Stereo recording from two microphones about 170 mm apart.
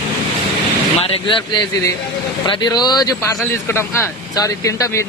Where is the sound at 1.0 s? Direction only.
30° left (ahead or behind).